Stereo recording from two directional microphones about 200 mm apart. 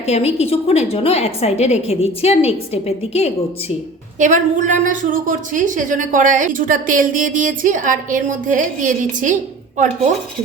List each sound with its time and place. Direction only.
0.1 s a woman's voice: 30° left (ahead or behind)
4.2 s a woman's voice: 40° right (ahead or behind)